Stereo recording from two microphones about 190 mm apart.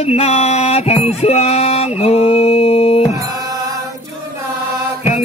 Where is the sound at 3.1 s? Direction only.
15° right (ahead or behind).